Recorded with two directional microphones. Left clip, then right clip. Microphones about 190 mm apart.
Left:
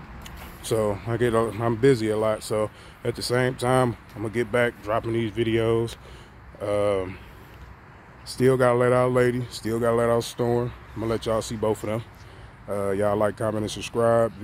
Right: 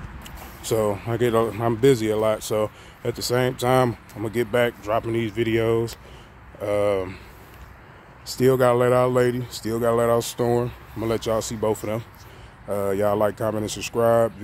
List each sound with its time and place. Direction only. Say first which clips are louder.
0.2 s speech: right 2 dB; centre (ahead or behind)
8.3 s speech: right 2 dB; centre (ahead or behind)
10.3 s speech: right 2 dB; 10° right (ahead or behind)
13.7 s speech: right 2 dB; 40° right (ahead or behind)
13.9 s speech: right 2 dB; 5° right (ahead or behind)